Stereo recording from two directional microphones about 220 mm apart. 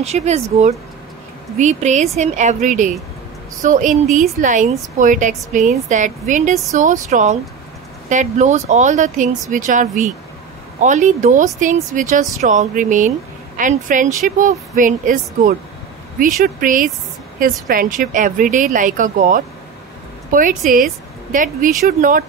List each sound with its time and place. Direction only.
0.0 s a woman's voice: 30° right (ahead or behind)